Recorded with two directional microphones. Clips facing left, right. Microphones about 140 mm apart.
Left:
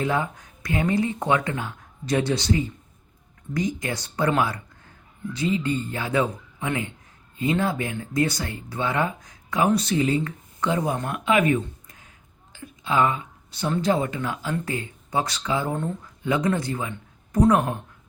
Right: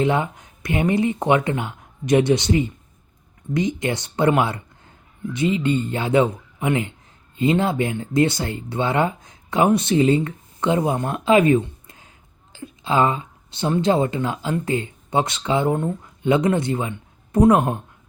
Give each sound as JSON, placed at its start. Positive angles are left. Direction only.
{"t": 0.0, "sound": "speech", "side_deg": -20}